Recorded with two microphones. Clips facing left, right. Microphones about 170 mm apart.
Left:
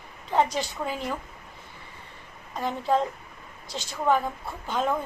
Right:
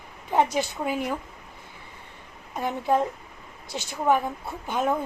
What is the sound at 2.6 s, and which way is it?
A woman's voice, 15° right (ahead or behind).